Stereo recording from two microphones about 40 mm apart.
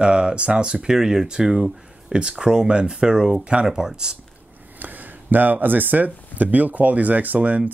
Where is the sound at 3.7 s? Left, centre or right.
Centre.